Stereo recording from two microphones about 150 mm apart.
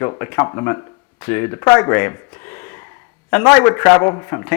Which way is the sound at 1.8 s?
15° left (ahead or behind).